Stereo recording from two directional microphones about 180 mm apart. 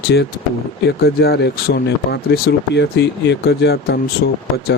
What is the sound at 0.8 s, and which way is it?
Speech, 60° left (ahead or behind).